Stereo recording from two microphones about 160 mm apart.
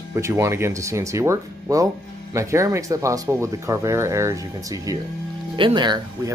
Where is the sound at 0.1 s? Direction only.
15° right (ahead or behind).